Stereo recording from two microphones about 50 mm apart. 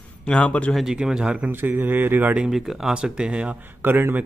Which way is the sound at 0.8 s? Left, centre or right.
Centre.